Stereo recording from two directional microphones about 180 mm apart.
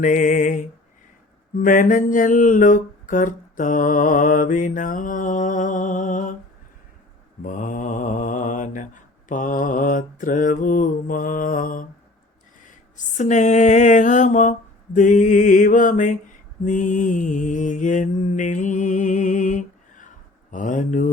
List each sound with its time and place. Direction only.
0.0 s mantra: 45° left (ahead or behind)
1.6 s mantra: 50° left (ahead or behind)
7.4 s mantra: 45° left (ahead or behind)
13.1 s mantra: 40° left (ahead or behind)